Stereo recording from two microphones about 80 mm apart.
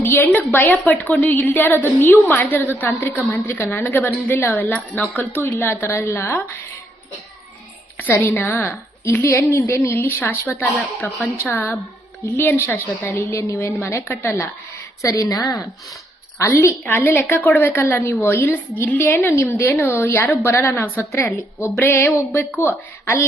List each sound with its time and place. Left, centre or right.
0.0 s a sound: left
0.3 s a woman's voice: left
7.9 s a woman's voice: left
14.3 s a woman's voice: left
15.0 s a woman's voice: left
16.4 s a woman's voice: left
16.8 s a woman's voice: left